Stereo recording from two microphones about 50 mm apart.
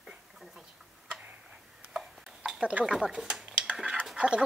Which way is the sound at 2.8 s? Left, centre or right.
Centre.